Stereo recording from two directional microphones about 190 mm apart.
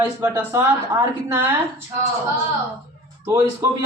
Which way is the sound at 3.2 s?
15° right (ahead or behind).